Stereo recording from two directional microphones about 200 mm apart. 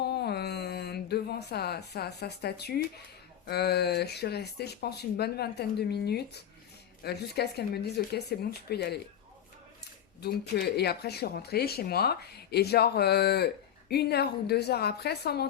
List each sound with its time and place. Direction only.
0.0 s a sound: 55° left (ahead or behind)
3.4 s speech: 55° left (ahead or behind)
10.2 s speech: 55° left (ahead or behind)